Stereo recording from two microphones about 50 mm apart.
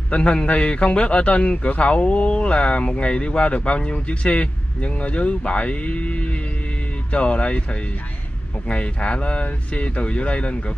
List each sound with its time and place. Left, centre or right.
0.1 s speech: left
8.6 s speech: left